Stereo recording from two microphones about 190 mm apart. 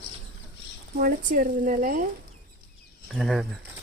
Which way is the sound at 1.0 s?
45° right (ahead or behind).